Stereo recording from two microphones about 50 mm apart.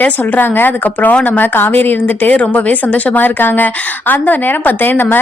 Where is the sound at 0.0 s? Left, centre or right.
Left.